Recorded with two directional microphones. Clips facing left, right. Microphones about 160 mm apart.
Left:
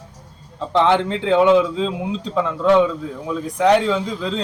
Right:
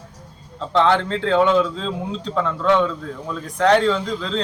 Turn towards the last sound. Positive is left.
turn(degrees=10)  # may be behind; listen again after turning